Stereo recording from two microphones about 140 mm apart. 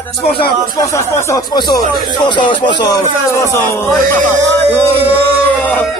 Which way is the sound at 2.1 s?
35° left (ahead or behind).